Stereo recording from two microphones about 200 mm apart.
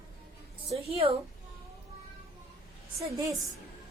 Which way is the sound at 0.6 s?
30° right (ahead or behind).